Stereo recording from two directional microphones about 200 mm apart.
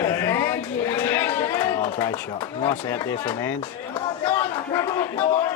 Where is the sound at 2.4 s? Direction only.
20° left (ahead or behind).